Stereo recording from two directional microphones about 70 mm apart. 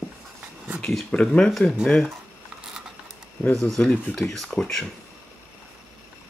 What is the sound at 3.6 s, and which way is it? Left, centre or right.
Speech, centre.